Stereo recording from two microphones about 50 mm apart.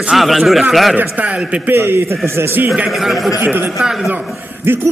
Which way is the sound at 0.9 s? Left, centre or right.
Right.